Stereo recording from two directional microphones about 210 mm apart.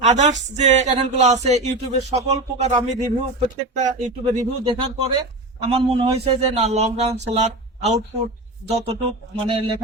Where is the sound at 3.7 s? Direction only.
35° right (ahead or behind).